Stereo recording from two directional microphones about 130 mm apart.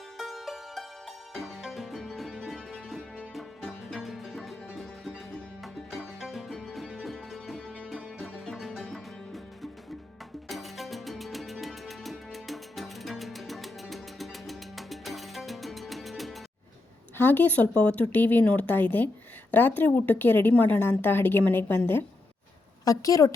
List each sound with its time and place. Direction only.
0.2 s music: centre (ahead or behind)
17.2 s a woman's voice: 15° left (ahead or behind)
22.8 s a woman's voice: 25° left (ahead or behind)